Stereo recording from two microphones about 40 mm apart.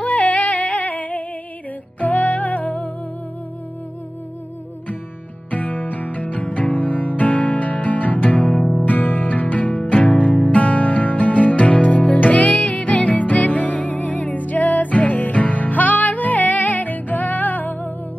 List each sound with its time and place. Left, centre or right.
0.0 s music: left
5.5 s music: left
8.8 s music: left